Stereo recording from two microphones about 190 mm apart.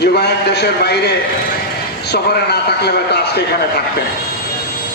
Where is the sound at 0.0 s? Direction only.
60° left (ahead or behind).